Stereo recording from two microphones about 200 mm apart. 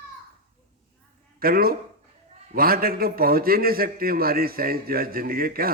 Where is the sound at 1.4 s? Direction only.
45° right (ahead or behind).